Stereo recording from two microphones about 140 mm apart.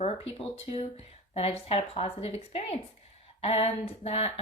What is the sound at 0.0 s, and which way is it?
Speech, 40° left (ahead or behind).